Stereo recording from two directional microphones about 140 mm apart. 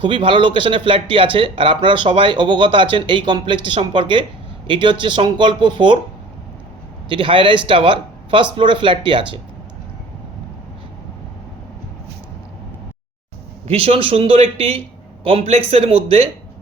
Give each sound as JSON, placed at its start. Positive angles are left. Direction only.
{"t": 0.0, "sound": "speech", "side_deg": -35}
{"t": 7.1, "sound": "speech", "side_deg": -35}
{"t": 13.7, "sound": "a man's voice", "side_deg": -45}